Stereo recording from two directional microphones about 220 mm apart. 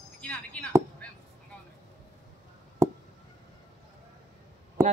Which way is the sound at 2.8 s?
15° right (ahead or behind).